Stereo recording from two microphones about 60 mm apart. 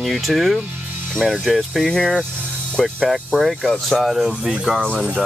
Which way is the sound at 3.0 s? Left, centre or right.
Centre.